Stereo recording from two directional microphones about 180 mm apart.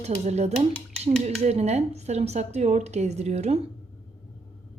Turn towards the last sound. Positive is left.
turn(degrees=-35)  # may be behind; listen again after turning